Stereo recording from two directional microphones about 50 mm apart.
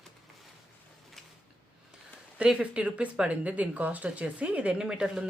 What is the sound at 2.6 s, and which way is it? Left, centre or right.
Speech, right.